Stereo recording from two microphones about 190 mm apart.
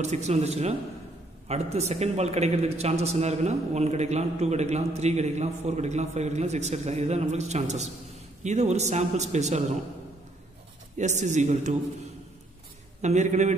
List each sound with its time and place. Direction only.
0.0 s a man's voice: 35° right (ahead or behind)
11.0 s a man's voice: 40° right (ahead or behind)
13.0 s a man's voice: 40° right (ahead or behind)